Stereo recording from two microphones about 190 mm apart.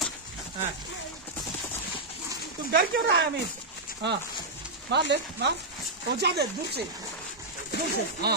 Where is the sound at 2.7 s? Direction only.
60° right (ahead or behind).